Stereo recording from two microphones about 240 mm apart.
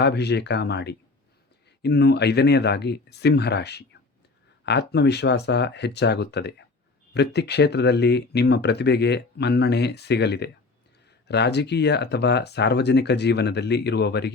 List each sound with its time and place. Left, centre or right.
0.0 s speech: left